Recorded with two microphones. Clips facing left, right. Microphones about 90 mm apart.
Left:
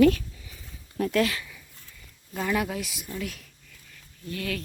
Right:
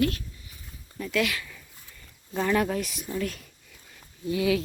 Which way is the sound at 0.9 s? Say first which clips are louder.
Left 4 dB; 55° left (ahead or behind).